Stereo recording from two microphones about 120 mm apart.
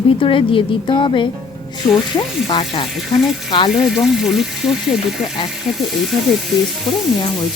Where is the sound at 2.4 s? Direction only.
45° left (ahead or behind).